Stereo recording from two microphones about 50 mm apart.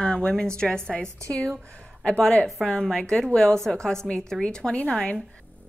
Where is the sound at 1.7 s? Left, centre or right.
Left.